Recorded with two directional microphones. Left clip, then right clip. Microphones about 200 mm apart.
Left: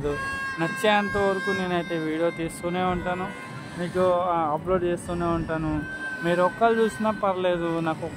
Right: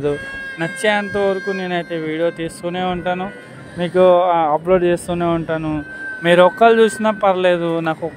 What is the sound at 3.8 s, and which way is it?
Speech, 35° right (ahead or behind).